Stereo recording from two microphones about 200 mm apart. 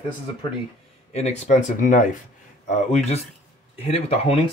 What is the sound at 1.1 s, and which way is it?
Speech, 35° left (ahead or behind).